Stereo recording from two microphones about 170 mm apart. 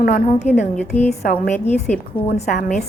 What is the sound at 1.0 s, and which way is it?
A woman's voice, 40° left (ahead or behind).